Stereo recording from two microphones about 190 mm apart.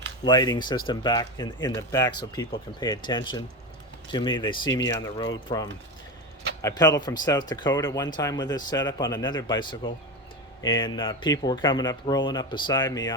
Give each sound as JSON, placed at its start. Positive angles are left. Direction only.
{"t": 0.3, "sound": "speech", "side_deg": 20}
{"t": 6.6, "sound": "speech", "side_deg": 15}